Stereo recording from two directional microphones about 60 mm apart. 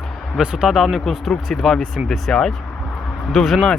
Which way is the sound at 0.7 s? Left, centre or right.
Centre.